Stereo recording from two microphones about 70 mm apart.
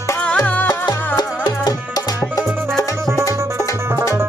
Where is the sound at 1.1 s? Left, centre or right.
Left.